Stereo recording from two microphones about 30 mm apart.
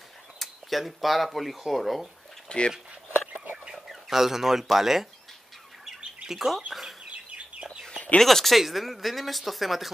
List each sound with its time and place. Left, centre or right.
0.4 s speech: centre
2.5 s speech: left
3.7 s bird: centre
4.7 s speech: centre
6.2 s speech: centre
6.7 s chicken: centre
7.1 s chicken: right
8.2 s speech: centre
8.5 s speech: centre